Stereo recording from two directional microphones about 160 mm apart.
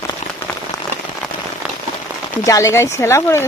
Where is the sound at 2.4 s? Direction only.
20° left (ahead or behind).